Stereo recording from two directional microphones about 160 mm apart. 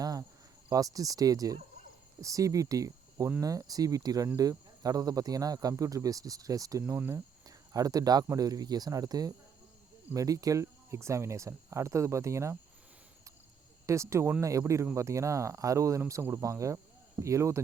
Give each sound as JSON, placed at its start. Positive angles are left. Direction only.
{"t": 0.0, "sound": "cricket", "side_deg": -20}
{"t": 0.7, "sound": "speech", "side_deg": -20}
{"t": 13.8, "sound": "speech", "side_deg": -20}